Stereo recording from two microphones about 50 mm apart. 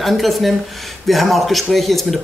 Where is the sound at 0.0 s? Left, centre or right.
Centre.